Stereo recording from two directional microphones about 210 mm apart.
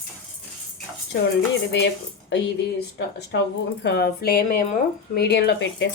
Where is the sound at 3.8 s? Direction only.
55° left (ahead or behind).